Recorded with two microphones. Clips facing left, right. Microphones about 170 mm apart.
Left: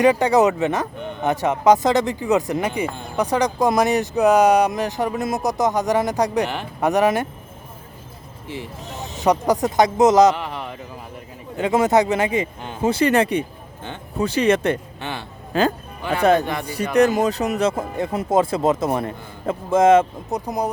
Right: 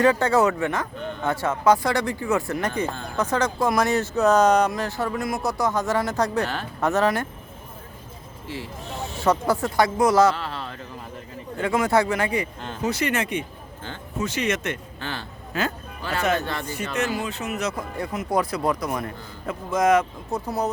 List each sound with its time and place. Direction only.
0.0 s speech: 15° left (ahead or behind)
8.4 s speech: 20° left (ahead or behind)
16.4 s speech: 15° left (ahead or behind)
17.0 s speech: 40° left (ahead or behind)
18.3 s speech: 20° left (ahead or behind)
20.4 s speech: 15° left (ahead or behind)